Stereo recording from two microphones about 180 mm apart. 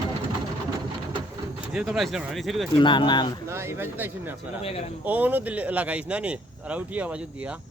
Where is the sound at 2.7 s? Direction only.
25° left (ahead or behind).